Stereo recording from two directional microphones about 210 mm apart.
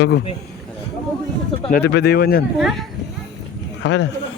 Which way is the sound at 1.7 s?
50° left (ahead or behind).